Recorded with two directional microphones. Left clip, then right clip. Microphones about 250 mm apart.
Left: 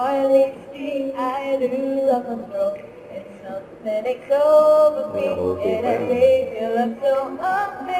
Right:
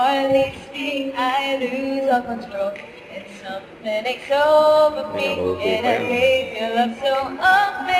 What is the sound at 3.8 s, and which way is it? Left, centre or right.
Music, centre.